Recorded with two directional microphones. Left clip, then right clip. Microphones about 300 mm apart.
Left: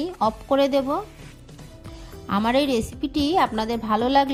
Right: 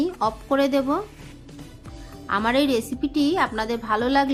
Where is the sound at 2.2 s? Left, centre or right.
Left.